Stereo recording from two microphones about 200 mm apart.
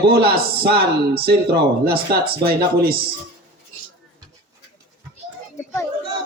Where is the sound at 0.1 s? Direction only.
50° right (ahead or behind).